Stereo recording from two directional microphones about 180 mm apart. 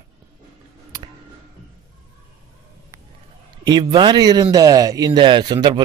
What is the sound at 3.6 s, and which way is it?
A man's voice, 25° right (ahead or behind).